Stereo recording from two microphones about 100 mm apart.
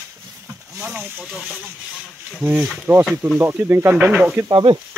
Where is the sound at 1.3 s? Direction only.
Centre (ahead or behind).